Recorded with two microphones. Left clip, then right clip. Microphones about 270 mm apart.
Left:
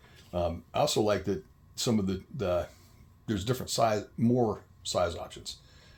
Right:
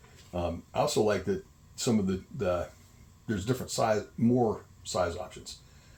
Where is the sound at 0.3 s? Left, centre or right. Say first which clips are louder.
Left 3 dB; left.